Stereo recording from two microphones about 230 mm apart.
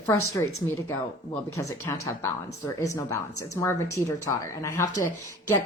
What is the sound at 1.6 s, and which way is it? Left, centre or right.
Speech, centre.